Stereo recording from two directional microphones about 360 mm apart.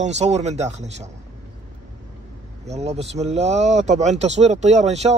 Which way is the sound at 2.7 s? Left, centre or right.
Centre.